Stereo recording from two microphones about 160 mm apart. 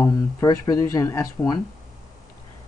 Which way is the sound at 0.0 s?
20° left (ahead or behind).